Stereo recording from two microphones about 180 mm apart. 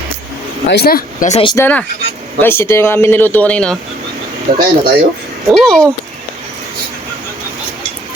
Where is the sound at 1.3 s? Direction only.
30° left (ahead or behind).